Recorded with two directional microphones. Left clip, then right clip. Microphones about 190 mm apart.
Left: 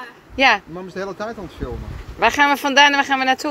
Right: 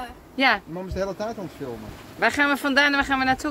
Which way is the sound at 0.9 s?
20° right (ahead or behind).